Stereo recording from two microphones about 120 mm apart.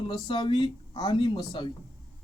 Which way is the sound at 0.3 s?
40° left (ahead or behind).